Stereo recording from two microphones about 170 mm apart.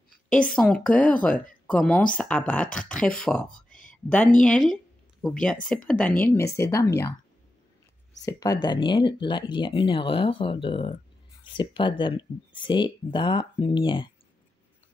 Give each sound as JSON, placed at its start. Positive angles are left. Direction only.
{"t": 0.3, "sound": "a woman's voice", "side_deg": 5}
{"t": 8.3, "sound": "speech", "side_deg": 20}